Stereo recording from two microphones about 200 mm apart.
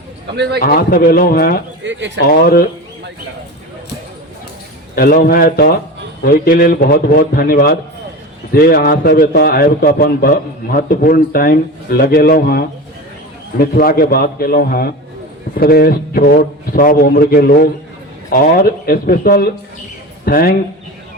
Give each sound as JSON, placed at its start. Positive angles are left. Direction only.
{"t": 0.3, "sound": "speech", "side_deg": -60}
{"t": 0.6, "sound": "a man's voice", "side_deg": 50}
{"t": 1.8, "sound": "speech", "side_deg": -65}
{"t": 2.2, "sound": "a man's voice", "side_deg": 50}
{"t": 4.9, "sound": "a man's voice", "side_deg": 50}